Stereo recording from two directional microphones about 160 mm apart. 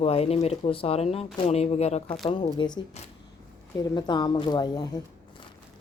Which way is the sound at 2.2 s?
30° left (ahead or behind).